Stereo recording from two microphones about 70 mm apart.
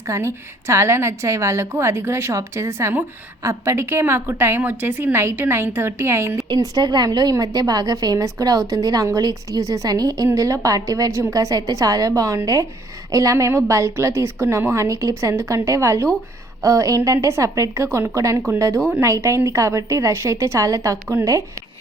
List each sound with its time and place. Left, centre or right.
0.1 s a woman's voice: right
6.5 s a woman's voice: right
10.3 s a woman's voice: right
17.8 s a woman's voice: right